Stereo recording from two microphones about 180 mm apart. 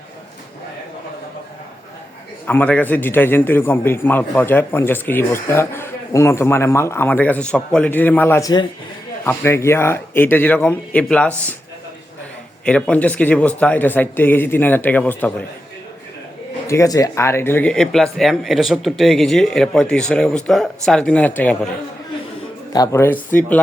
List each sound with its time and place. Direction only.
2.5 s a man's voice: 10° left (ahead or behind)
12.6 s a man's voice: 5° left (ahead or behind)
16.6 s speech: 15° left (ahead or behind)
22.7 s a man's voice: 20° left (ahead or behind)